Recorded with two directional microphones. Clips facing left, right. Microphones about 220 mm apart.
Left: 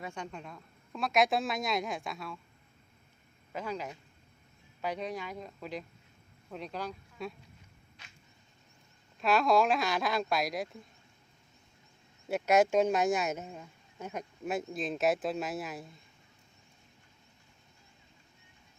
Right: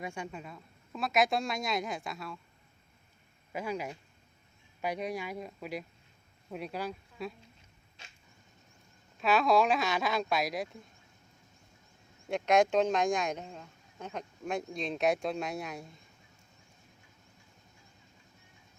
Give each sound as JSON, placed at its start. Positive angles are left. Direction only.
{"t": 0.0, "sound": "speech", "side_deg": -10}
{"t": 3.5, "sound": "speech", "side_deg": -10}
{"t": 8.0, "sound": "a sound", "side_deg": -25}
{"t": 9.2, "sound": "speech", "side_deg": 0}
{"t": 12.3, "sound": "speech", "side_deg": 5}